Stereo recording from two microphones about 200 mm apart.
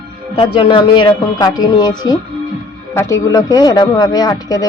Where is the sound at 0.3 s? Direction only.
30° left (ahead or behind).